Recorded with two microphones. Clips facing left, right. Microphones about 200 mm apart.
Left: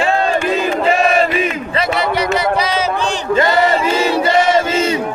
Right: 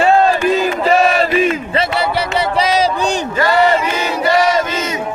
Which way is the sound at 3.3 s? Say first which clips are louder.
Left 1 dB; 25° left (ahead or behind).